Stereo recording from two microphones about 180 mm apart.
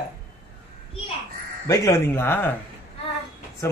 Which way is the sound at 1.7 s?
15° left (ahead or behind).